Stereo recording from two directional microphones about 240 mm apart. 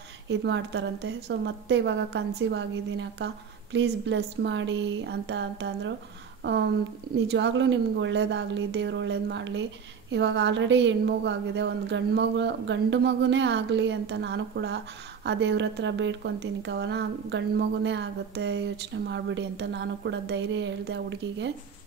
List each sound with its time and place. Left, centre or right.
0.3 s speech: right